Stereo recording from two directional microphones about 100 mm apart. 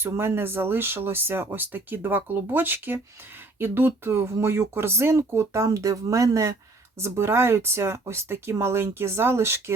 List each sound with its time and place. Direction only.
0.0 s speech: 25° right (ahead or behind)